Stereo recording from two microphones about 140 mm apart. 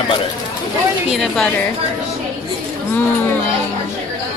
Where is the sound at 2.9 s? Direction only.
10° left (ahead or behind).